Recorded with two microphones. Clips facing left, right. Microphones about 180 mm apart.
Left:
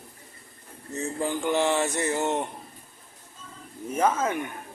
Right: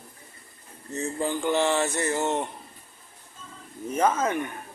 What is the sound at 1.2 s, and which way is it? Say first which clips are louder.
A man's voice: even; 15° left (ahead or behind).